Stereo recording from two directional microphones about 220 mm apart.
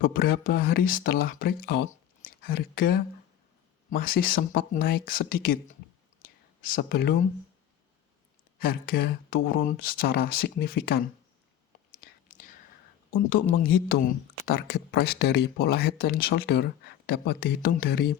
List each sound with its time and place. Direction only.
0.0 s speech: 40° left (ahead or behind)
6.2 s whispering: 40° left (ahead or behind)
8.5 s speech: 40° left (ahead or behind)
11.9 s whispering: 35° left (ahead or behind)
13.1 s speech: 40° left (ahead or behind)